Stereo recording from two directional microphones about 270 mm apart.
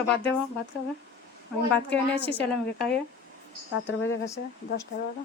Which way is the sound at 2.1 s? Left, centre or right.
Centre.